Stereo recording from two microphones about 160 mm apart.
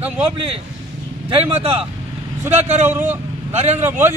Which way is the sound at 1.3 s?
35° right (ahead or behind).